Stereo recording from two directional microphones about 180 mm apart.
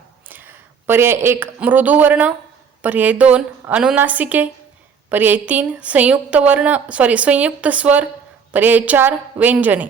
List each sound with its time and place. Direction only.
0.3 s a woman's voice: 10° right (ahead or behind)